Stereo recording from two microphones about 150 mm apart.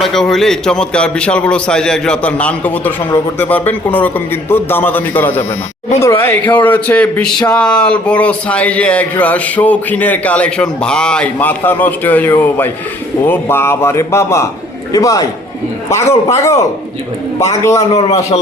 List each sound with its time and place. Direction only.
0.0 s a man's voice: centre (ahead or behind); by 16.6 s 20° left (ahead or behind)
17.7 s a man's voice: 45° left (ahead or behind)